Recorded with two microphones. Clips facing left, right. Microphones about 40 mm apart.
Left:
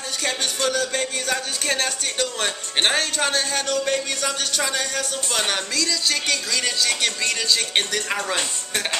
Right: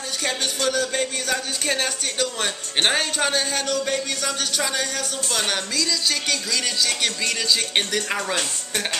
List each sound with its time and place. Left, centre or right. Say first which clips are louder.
0.2 s speech: even; centre